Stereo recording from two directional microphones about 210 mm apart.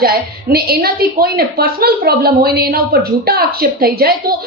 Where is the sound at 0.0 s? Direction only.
45° right (ahead or behind).